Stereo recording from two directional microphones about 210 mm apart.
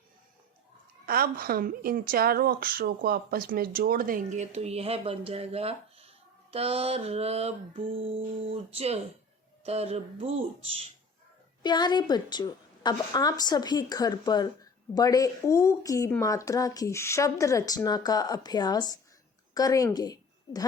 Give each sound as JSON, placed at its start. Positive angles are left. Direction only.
{"t": 1.0, "sound": "a woman's voice", "side_deg": -45}
{"t": 11.6, "sound": "a woman's voice", "side_deg": 20}